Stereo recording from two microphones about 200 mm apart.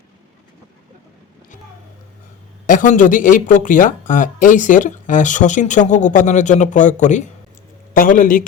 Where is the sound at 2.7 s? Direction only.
40° left (ahead or behind).